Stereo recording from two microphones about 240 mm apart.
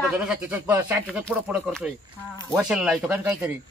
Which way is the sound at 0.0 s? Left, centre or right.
Centre.